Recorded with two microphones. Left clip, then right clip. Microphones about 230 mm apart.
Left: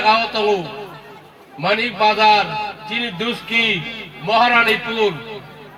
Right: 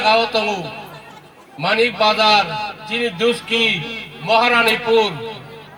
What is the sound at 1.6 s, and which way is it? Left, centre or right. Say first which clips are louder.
A man's voice: right 1 dB; right.